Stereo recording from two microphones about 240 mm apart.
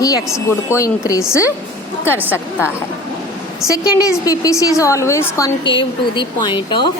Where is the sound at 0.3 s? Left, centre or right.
Centre.